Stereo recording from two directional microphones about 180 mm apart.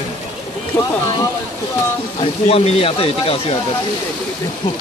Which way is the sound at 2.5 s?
35° left (ahead or behind).